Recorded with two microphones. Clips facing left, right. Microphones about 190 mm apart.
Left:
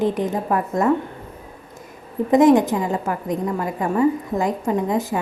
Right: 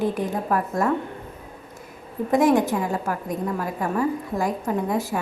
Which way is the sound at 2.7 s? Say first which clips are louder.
Left 2 dB; centre (ahead or behind).